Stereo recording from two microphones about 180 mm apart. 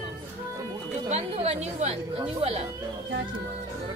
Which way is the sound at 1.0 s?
35° right (ahead or behind).